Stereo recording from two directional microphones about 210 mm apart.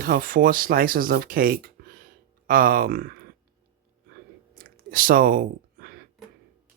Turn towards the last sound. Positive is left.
turn(degrees=-40)  # may be behind; listen again after turning